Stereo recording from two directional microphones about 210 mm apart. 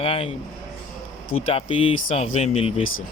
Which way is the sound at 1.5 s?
25° left (ahead or behind).